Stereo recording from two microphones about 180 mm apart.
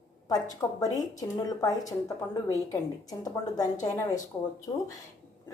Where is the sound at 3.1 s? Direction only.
20° left (ahead or behind).